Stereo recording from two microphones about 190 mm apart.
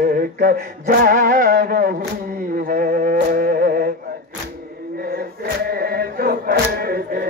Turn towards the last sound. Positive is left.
turn(degrees=-50)  # may be behind; listen again after turning